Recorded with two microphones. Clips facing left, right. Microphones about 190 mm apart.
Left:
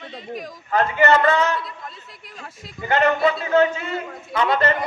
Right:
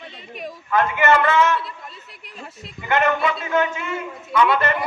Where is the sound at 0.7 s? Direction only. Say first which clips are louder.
Even; 35° left (ahead or behind).